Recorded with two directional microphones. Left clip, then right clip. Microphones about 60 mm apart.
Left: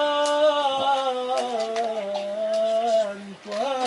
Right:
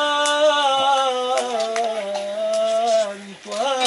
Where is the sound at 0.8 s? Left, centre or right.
Centre.